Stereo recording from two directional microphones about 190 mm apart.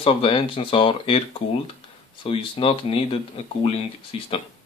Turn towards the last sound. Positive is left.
turn(degrees=30)  # may be behind; listen again after turning